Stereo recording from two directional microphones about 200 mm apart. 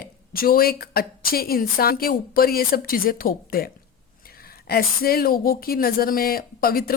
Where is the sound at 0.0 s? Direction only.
45° left (ahead or behind).